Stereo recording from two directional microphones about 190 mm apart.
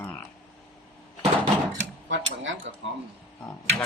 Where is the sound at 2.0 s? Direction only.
75° right (ahead or behind).